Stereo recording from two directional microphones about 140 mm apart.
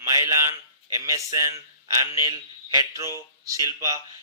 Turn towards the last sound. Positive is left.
turn(degrees=-25)  # may be behind; listen again after turning